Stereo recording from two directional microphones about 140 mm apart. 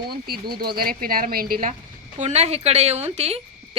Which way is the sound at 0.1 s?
90° right.